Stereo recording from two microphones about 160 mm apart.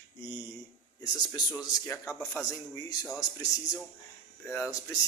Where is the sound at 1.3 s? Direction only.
25° left (ahead or behind).